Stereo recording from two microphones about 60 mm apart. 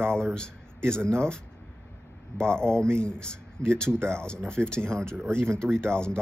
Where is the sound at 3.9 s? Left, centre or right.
Right.